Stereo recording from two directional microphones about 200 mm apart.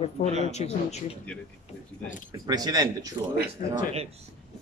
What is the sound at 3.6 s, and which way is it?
Speech, 45° left (ahead or behind).